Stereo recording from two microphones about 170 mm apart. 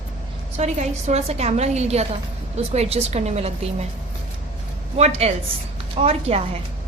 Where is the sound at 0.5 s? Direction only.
40° right (ahead or behind).